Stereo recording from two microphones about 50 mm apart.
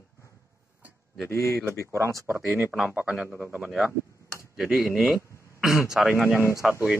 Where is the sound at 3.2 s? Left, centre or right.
Right.